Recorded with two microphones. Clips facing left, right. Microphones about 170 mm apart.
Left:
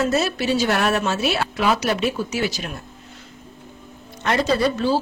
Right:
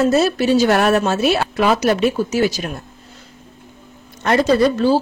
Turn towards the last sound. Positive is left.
turn(degrees=-40)  # may be behind; listen again after turning